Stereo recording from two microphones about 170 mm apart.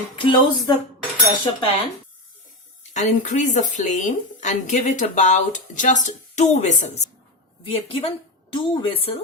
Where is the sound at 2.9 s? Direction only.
45° left (ahead or behind).